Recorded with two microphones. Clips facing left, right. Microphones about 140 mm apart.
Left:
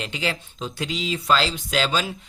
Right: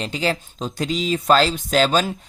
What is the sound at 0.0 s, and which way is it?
Speech, 40° right (ahead or behind).